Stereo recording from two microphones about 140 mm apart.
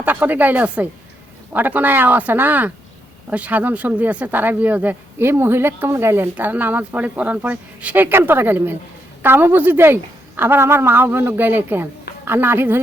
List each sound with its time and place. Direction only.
0.0 s speech: 15° right (ahead or behind)